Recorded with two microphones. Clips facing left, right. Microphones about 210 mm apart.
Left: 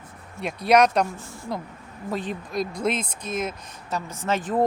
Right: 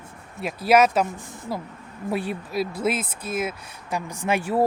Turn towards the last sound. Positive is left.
turn(degrees=-10)  # may be behind; listen again after turning